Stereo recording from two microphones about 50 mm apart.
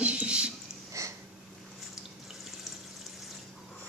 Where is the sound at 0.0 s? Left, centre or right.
Right.